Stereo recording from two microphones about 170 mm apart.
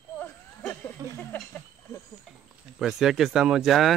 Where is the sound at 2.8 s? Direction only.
Centre (ahead or behind).